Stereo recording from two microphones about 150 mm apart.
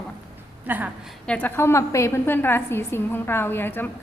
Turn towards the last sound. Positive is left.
turn(degrees=15)  # may be behind; listen again after turning